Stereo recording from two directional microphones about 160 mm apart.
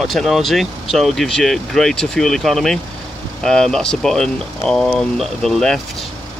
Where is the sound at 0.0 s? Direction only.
Centre (ahead or behind).